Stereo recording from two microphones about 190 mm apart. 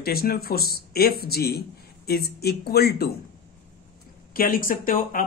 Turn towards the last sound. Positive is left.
turn(degrees=45)  # may be behind; listen again after turning